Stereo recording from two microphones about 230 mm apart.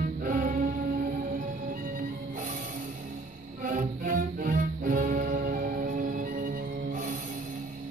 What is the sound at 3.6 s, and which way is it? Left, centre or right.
Music, right.